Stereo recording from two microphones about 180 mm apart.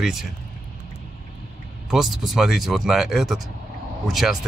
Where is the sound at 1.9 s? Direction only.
Centre (ahead or behind).